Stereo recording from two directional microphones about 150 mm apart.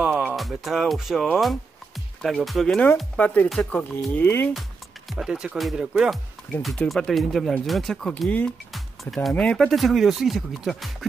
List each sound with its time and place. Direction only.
0.4 s speech: centre (ahead or behind)
4.1 s speech: 15° left (ahead or behind)
5.1 s speech: 5° right (ahead or behind)